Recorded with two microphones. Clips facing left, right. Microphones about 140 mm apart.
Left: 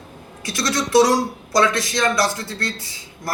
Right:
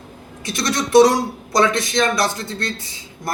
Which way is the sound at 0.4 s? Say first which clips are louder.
Right 1 dB; 20° right (ahead or behind).